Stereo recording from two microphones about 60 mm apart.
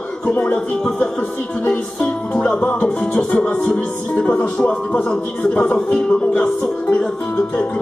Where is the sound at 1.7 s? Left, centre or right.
Centre.